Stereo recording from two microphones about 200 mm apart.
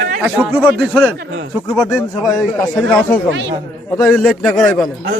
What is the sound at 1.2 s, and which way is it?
Speech, 70° right (ahead or behind).